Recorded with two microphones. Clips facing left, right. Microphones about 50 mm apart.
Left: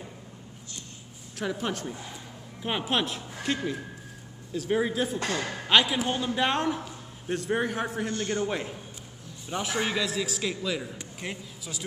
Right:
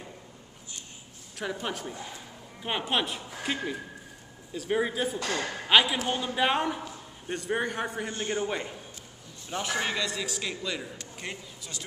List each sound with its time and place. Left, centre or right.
1.4 s a man's voice: centre
8.1 s a man's voice: centre
8.5 s a man's voice: centre